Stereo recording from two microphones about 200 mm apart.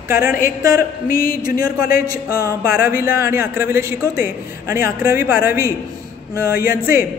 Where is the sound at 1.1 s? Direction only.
45° left (ahead or behind).